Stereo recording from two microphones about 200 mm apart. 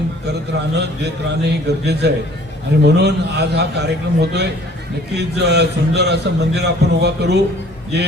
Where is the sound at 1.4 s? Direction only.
55° right (ahead or behind).